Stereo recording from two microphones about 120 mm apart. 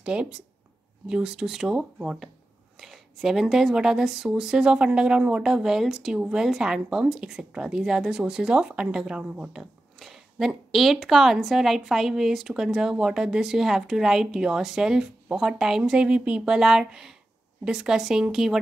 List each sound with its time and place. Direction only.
0.0 s speech: 10° right (ahead or behind)